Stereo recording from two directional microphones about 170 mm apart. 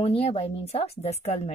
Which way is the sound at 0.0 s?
35° left (ahead or behind).